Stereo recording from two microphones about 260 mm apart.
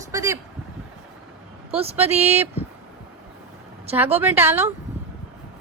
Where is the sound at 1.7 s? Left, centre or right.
Right.